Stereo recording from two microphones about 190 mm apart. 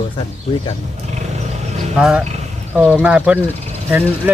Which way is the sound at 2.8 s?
5° left (ahead or behind).